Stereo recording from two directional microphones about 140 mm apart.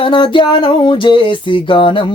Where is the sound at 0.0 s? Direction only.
35° left (ahead or behind).